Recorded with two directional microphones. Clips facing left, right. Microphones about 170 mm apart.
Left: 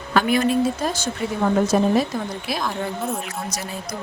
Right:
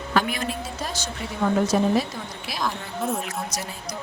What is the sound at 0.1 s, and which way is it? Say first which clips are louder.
Speech: left 3 dB; 60° left (ahead or behind).